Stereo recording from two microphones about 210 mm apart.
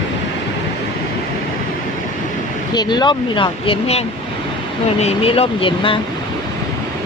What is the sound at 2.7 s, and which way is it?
Speech, 20° left (ahead or behind).